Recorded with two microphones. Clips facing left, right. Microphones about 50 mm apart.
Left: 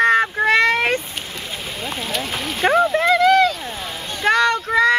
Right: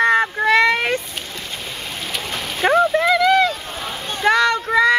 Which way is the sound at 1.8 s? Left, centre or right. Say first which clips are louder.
Left 4 dB; centre.